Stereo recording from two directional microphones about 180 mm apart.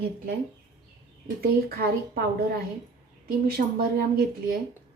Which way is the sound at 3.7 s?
55° right (ahead or behind).